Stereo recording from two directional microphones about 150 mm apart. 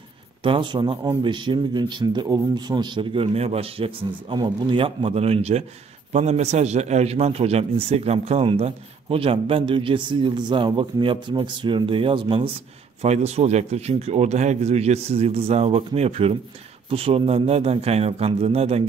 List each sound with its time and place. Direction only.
0.4 s a man's voice: 35° right (ahead or behind)